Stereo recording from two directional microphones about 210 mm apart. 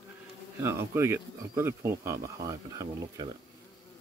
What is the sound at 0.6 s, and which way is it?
Speech, 10° right (ahead or behind).